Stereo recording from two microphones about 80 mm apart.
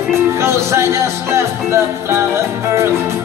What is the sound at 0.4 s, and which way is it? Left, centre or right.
Music, right.